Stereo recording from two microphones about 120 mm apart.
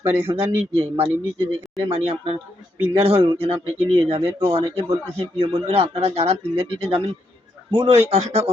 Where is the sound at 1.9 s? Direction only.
50° right (ahead or behind).